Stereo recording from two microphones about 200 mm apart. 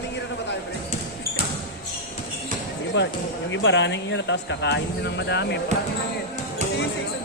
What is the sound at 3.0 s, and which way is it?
Speech, 65° left (ahead or behind).